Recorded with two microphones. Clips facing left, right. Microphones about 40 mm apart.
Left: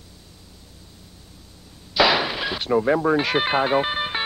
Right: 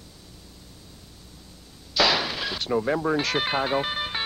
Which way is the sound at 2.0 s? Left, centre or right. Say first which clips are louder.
Left 4 dB; centre.